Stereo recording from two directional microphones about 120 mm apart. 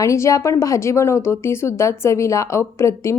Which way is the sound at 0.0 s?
25° left (ahead or behind).